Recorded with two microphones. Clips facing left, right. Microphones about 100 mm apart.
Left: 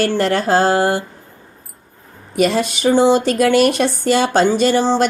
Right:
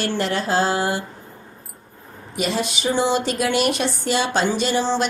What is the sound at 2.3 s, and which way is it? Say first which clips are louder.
Speech: left 7 dB; 50° left (ahead or behind).